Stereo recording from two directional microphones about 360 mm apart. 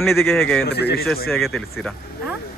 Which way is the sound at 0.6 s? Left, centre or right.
Left.